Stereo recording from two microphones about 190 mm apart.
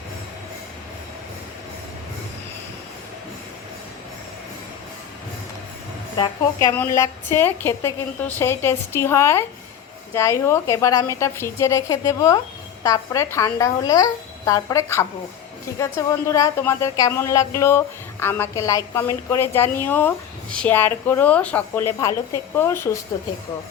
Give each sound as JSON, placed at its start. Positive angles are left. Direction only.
{"t": 6.1, "sound": "a woman's voice", "side_deg": 20}